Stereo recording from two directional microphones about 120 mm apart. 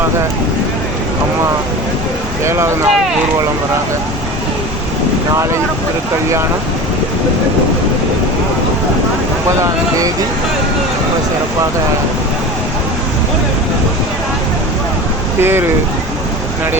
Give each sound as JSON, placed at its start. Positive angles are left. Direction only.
{"t": 2.4, "sound": "speech", "side_deg": -25}
{"t": 9.5, "sound": "speech", "side_deg": -25}
{"t": 15.4, "sound": "speech", "side_deg": -20}